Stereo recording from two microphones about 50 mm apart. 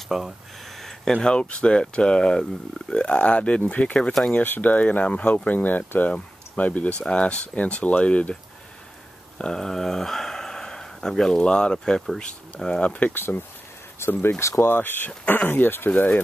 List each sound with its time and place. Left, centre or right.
0.1 s speech: centre
0.7 s a sound: centre
1.1 s speech: centre
4.3 s speech: left
7.0 s speech: left
9.4 s speech: centre
13.1 s speech: left
14.4 s speech: left
14.7 s speech: left
15.9 s speech: left